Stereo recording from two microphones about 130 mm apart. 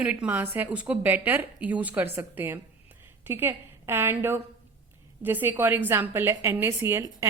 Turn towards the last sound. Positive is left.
turn(degrees=-20)  # may be behind; listen again after turning